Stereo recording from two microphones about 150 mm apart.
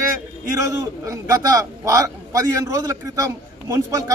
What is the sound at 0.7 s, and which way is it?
A man's voice, 20° right (ahead or behind).